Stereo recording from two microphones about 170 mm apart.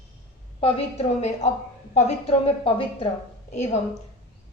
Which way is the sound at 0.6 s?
35° left (ahead or behind).